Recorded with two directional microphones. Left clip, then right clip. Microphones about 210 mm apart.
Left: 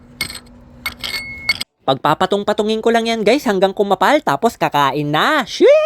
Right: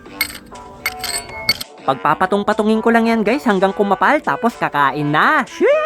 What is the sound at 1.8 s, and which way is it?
Speech, 10° left (ahead or behind).